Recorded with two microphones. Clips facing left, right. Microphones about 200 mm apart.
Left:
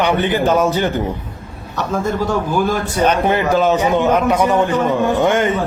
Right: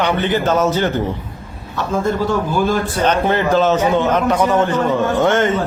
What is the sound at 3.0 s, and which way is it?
A man's voice, 10° left (ahead or behind).